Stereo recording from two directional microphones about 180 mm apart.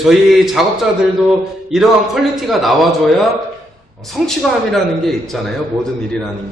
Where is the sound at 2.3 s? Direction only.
Centre (ahead or behind).